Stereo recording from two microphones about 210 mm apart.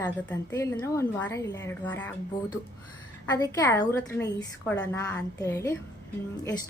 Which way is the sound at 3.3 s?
15° left (ahead or behind).